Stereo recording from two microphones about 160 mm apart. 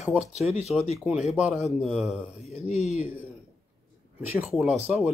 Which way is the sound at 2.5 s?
45° left (ahead or behind).